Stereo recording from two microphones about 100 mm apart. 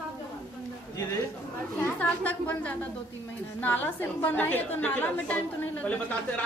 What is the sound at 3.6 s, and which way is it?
A woman's voice, 20° left (ahead or behind).